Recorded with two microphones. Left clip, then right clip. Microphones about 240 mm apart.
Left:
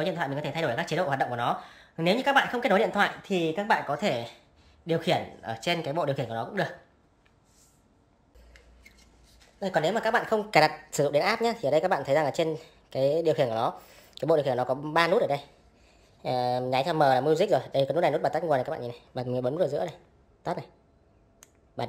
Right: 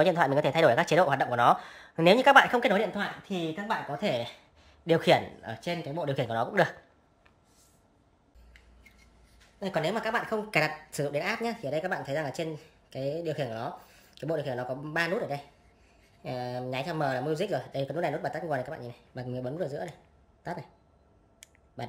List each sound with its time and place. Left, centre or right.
0.0 s speech: centre
2.7 s speech: centre
5.5 s speech: centre
6.1 s speech: centre
9.6 s speech: centre